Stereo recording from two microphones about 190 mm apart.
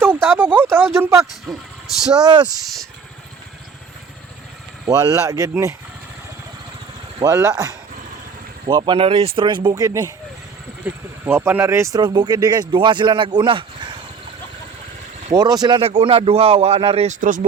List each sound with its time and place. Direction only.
0.0 s a sound: 10° right (ahead or behind)
0.9 s speech: 15° right (ahead or behind)
4.9 s speech: 20° right (ahead or behind)
7.2 s speech: 15° right (ahead or behind)
15.3 s speech: 20° right (ahead or behind)
17.2 s speech: 45° right (ahead or behind)